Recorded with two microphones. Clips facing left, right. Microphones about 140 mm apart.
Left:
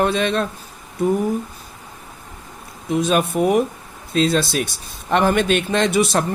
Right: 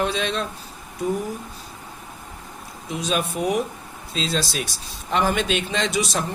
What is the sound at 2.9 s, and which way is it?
Speech, 55° left (ahead or behind).